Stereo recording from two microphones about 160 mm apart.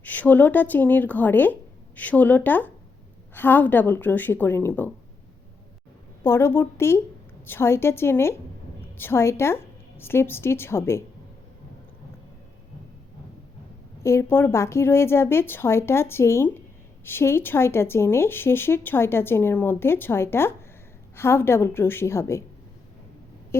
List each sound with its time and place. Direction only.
0.0 s a woman's voice: 10° left (ahead or behind)
6.2 s a woman's voice: 15° left (ahead or behind)
14.0 s a woman's voice: 15° left (ahead or behind)